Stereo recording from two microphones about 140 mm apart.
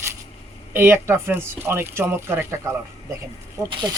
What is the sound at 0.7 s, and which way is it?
Speech, 15° right (ahead or behind).